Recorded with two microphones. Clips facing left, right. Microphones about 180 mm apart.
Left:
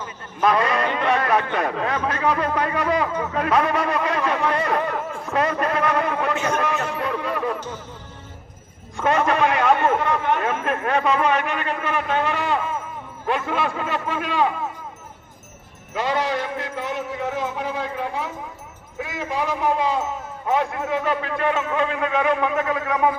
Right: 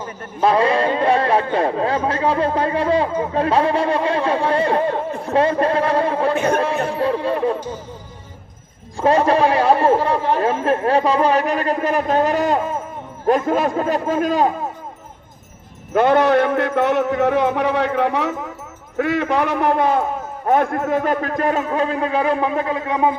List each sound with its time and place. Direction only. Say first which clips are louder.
0.3 s a man's voice: right 4 dB; 30° right (ahead or behind)
6.6 s chatter: right 5 dB; 30° right (ahead or behind)
9.0 s a man's voice: right 5 dB; 35° right (ahead or behind)
15.9 s music: right 9 dB; 55° right (ahead or behind); by 18.5 s 75° right (ahead or behind)
18.9 s a man's voice: right 8 dB; 70° right (ahead or behind); by 23.1 s 30° right (ahead or behind)